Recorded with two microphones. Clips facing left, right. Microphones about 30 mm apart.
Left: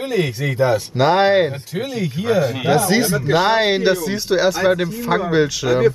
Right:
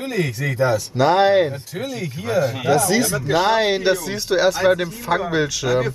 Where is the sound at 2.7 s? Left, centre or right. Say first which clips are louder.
Left 2 dB; left.